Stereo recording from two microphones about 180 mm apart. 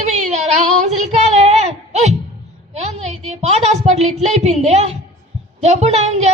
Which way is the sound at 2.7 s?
35° right (ahead or behind).